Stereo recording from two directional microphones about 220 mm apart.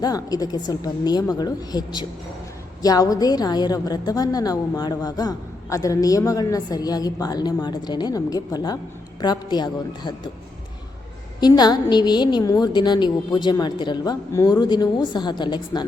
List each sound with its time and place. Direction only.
0.0 s a woman's voice: 15° left (ahead or behind)
11.3 s a woman's voice: 20° left (ahead or behind)